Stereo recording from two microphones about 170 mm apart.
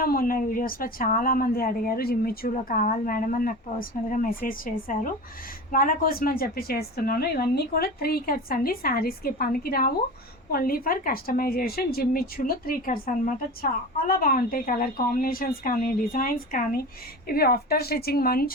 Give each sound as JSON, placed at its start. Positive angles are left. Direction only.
{"t": 0.0, "sound": "a woman's voice", "side_deg": 60}